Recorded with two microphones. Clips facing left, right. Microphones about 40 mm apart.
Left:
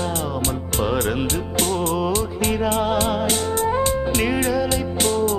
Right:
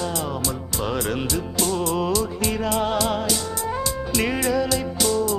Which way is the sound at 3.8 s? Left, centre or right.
Left.